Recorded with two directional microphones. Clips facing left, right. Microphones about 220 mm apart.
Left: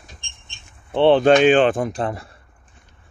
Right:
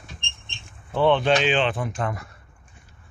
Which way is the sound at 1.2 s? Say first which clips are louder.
Left 8 dB; 50° left (ahead or behind).